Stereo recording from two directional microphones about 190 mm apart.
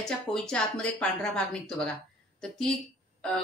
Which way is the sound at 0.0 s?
5° left (ahead or behind).